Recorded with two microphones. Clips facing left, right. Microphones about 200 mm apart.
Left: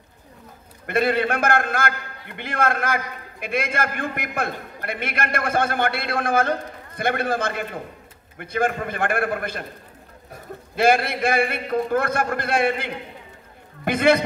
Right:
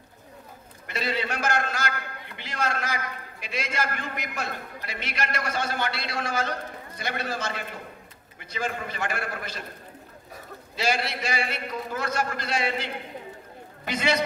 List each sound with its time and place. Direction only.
0.8 s a man's voice: 55° left (ahead or behind)
10.8 s a man's voice: 55° left (ahead or behind)